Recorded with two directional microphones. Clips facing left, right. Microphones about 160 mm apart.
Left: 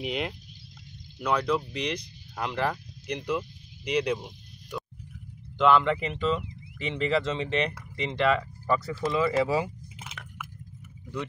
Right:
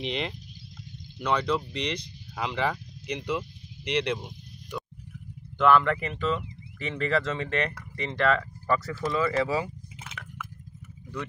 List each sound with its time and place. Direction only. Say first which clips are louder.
0.0 s speech: even; 5° left (ahead or behind)
5.6 s speech: even; 15° left (ahead or behind)
9.9 s squish: right 1 dB; centre (ahead or behind)